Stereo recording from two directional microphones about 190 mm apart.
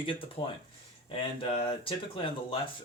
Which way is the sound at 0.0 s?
30° left (ahead or behind).